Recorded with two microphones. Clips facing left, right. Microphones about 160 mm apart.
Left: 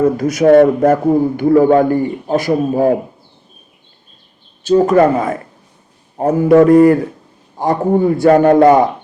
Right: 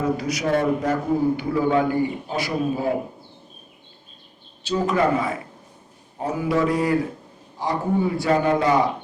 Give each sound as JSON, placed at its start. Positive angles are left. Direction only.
{"t": 0.0, "sound": "a man's voice", "side_deg": 50}
{"t": 4.6, "sound": "a man's voice", "side_deg": 50}